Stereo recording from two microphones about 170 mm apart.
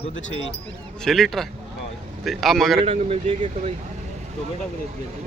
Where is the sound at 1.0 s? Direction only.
Centre (ahead or behind).